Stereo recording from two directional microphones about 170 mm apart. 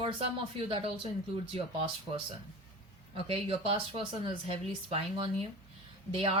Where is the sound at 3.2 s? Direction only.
35° right (ahead or behind).